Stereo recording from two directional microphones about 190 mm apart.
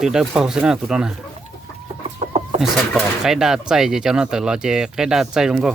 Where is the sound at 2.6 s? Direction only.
Centre (ahead or behind).